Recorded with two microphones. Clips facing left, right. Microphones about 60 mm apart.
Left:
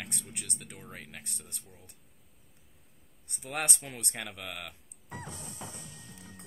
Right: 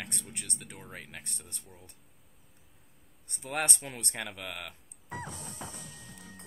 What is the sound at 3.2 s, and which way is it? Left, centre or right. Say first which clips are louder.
Speech: right 2 dB; centre.